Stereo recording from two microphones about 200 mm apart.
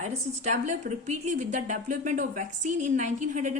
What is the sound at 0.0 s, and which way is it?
Speech, 35° right (ahead or behind).